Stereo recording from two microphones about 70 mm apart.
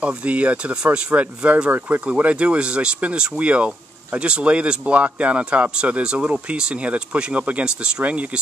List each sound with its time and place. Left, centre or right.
0.0 s speech: centre